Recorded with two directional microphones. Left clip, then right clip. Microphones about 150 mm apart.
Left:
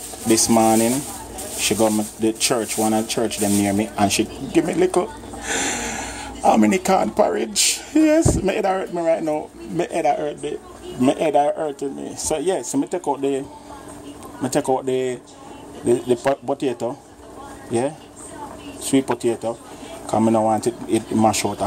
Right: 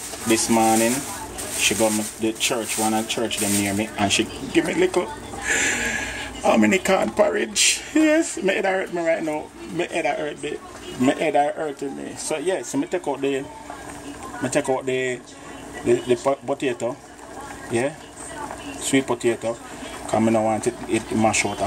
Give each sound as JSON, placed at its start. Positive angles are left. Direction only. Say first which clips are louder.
{"t": 0.3, "sound": "speech", "louder": "left 2 dB", "side_deg": 35}
{"t": 12.3, "sound": "speech", "louder": "left 3 dB", "side_deg": 30}
{"t": 12.7, "sound": "speech", "louder": "left 2 dB", "side_deg": 15}
{"t": 14.4, "sound": "speech", "louder": "left 2 dB", "side_deg": 25}